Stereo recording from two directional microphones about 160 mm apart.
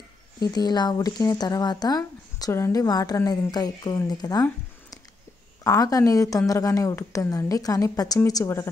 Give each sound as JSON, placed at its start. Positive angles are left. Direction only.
{"t": 0.5, "sound": "speech", "side_deg": 25}
{"t": 5.6, "sound": "speech", "side_deg": 20}